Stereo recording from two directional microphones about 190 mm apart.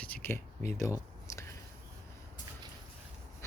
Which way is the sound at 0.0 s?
10° left (ahead or behind).